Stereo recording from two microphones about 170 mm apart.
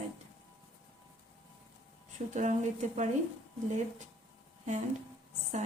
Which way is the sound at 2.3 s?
45° right (ahead or behind).